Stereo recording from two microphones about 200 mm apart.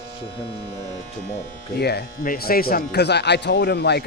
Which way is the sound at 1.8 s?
55° left (ahead or behind).